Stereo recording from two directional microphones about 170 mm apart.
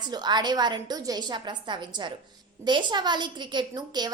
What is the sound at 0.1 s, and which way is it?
A woman's voice, 25° right (ahead or behind).